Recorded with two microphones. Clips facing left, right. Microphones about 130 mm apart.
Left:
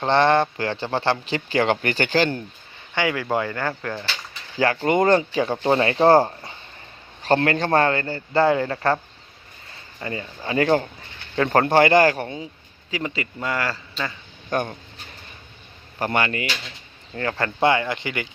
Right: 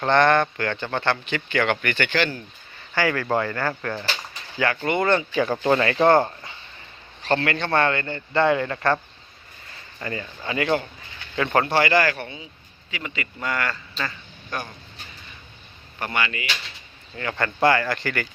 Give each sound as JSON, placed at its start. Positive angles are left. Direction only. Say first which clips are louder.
{"t": 0.0, "sound": "speech", "louder": "left 1 dB", "side_deg": 30}
{"t": 2.9, "sound": "speech", "louder": "even", "side_deg": 15}
{"t": 4.5, "sound": "speech", "louder": "left 4 dB", "side_deg": 30}
{"t": 10.0, "sound": "speech", "louder": "left 1 dB", "side_deg": 25}
{"t": 14.5, "sound": "speech", "louder": "left 8 dB", "side_deg": 45}
{"t": 16.0, "sound": "speech", "louder": "left 4 dB", "side_deg": 40}
{"t": 17.2, "sound": "speech", "louder": "left 1 dB", "side_deg": 35}